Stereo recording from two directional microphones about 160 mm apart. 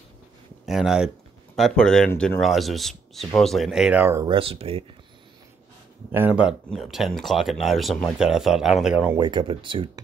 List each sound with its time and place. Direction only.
0.7 s speech: centre (ahead or behind)
4.3 s speech: 35° right (ahead or behind)
6.1 s speech: 10° right (ahead or behind)
9.2 s speech: 30° right (ahead or behind)